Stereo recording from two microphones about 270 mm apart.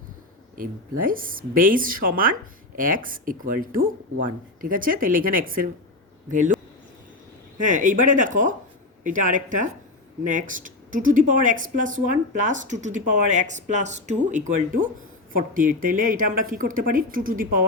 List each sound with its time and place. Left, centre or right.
0.5 s speech: right
7.6 s speech: right